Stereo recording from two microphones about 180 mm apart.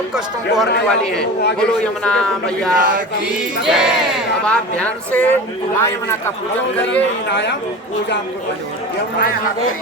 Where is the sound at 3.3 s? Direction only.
5° right (ahead or behind).